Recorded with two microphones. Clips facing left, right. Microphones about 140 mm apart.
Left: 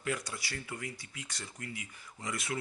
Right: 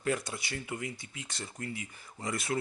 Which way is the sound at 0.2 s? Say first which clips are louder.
Right 3 dB; 20° right (ahead or behind).